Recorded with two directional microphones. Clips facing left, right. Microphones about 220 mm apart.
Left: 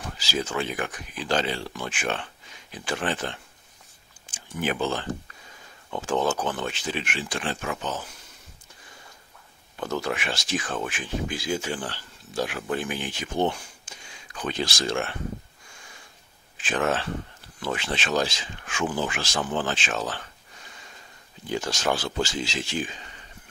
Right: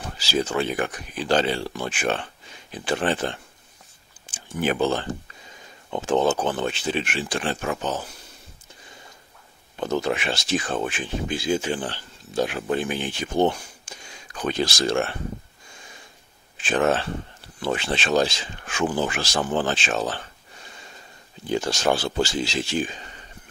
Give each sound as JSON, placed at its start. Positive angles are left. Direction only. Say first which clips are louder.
{"t": 0.3, "sound": "speech", "louder": "right 5 dB", "side_deg": -35}
{"t": 4.6, "sound": "speech", "louder": "right 5 dB", "side_deg": -35}
{"t": 5.9, "sound": "speech", "louder": "right 4 dB", "side_deg": -25}
{"t": 9.8, "sound": "speech", "louder": "right 4 dB", "side_deg": -20}
{"t": 13.4, "sound": "speech", "louder": "right 4 dB", "side_deg": -40}
{"t": 16.6, "sound": "speech", "louder": "right 4 dB", "side_deg": -30}
{"t": 21.5, "sound": "speech", "louder": "right 4 dB", "side_deg": -30}